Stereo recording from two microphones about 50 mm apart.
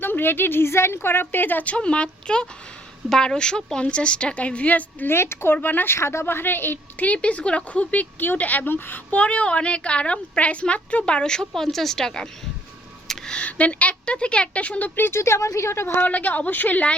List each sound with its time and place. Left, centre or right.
0.0 s speech: left
0.9 s a woman's voice: left
5.0 s a woman's voice: left
5.5 s speech: left
5.9 s a woman's voice: left
6.2 s a woman's voice: left
7.0 s a woman's voice: left
8.2 s a woman's voice: left; by 12.3 s centre
13.1 s a sound: centre
13.4 s a woman's voice: left
14.9 s a woman's voice: left
15.9 s speech: left